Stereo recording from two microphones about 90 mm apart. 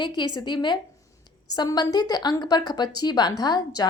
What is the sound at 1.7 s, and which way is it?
Speech, 50° left (ahead or behind).